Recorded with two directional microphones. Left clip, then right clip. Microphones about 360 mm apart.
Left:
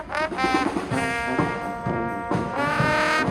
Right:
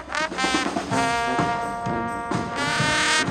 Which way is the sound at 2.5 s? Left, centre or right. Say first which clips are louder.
Even; centre.